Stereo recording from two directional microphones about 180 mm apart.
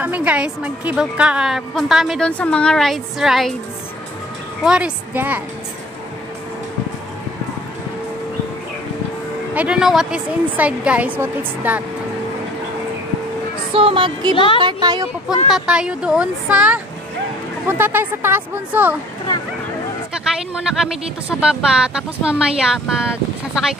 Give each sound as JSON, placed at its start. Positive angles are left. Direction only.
{"t": 0.0, "sound": "a woman's voice", "side_deg": -10}
{"t": 4.6, "sound": "a woman's voice", "side_deg": -5}
{"t": 9.5, "sound": "a woman's voice", "side_deg": -5}
{"t": 13.7, "sound": "speech", "side_deg": -30}
{"t": 14.3, "sound": "speech", "side_deg": 30}
{"t": 14.6, "sound": "speech", "side_deg": -25}
{"t": 15.2, "sound": "a woman's voice", "side_deg": -5}
{"t": 20.5, "sound": "a woman's voice", "side_deg": -5}